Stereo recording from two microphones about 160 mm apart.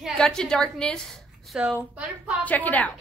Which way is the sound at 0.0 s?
5° left (ahead or behind).